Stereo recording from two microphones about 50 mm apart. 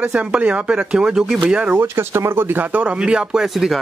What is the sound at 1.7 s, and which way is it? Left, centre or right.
Speech, right.